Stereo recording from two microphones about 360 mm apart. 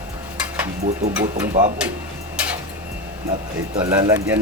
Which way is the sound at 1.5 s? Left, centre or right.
Centre.